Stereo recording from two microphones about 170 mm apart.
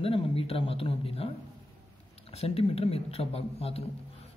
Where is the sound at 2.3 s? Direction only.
35° left (ahead or behind).